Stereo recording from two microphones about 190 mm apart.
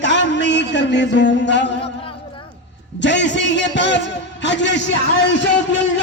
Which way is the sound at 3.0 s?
70° left (ahead or behind).